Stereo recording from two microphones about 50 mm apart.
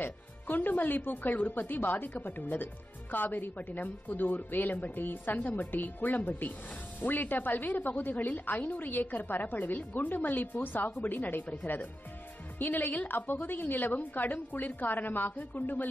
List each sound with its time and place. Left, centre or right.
0.0 s a woman's voice: left